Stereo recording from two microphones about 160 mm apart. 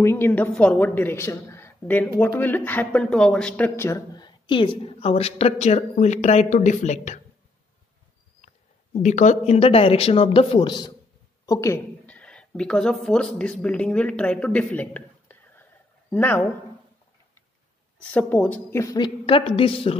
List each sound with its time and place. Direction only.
0.0 s a woman's voice: 15° left (ahead or behind); by 7.2 s 45° left (ahead or behind)
8.9 s a woman's voice: 45° left (ahead or behind); by 16.4 s 10° left (ahead or behind)
18.1 s a woman's voice: 10° left (ahead or behind); by 20.0 s 35° left (ahead or behind)